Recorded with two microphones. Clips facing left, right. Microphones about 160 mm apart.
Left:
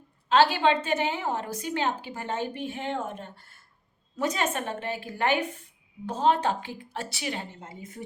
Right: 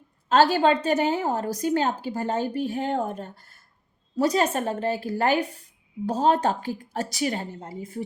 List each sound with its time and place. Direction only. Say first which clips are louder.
0.3 s a woman's voice: right 3 dB; 45° right (ahead or behind)